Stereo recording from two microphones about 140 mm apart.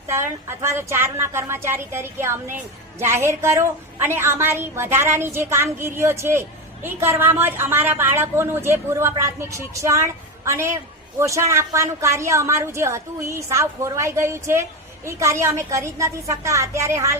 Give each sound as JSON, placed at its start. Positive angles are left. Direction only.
{"t": 0.1, "sound": "a woman's voice", "side_deg": -20}